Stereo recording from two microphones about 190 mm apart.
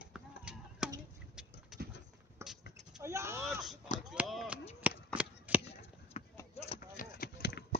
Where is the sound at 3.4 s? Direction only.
Centre (ahead or behind).